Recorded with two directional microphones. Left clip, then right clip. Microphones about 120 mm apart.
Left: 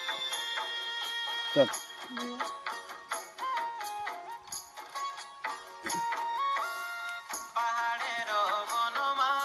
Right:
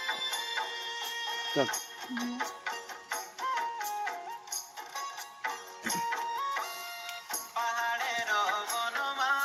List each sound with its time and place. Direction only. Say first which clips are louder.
0.0 s music: right 1 dB; 30° left (ahead or behind)